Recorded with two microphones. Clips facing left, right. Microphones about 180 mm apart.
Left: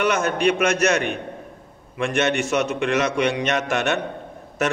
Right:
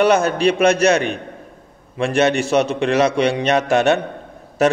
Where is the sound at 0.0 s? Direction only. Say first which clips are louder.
Right 5 dB; 30° right (ahead or behind).